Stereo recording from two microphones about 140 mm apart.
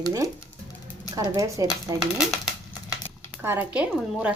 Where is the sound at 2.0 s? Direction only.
Centre (ahead or behind).